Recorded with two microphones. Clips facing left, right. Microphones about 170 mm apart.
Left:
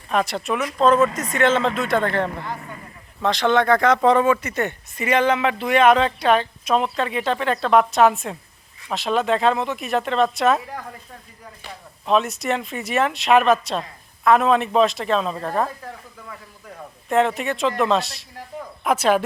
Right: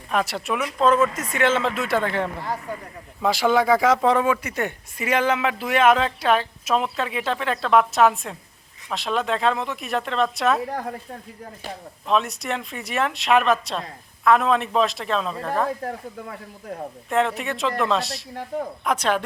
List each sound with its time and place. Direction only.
0.1 s speech: 5° right (ahead or behind)
12.0 s speech: centre (ahead or behind)
15.8 s speech: 55° right (ahead or behind)
17.1 s speech: centre (ahead or behind)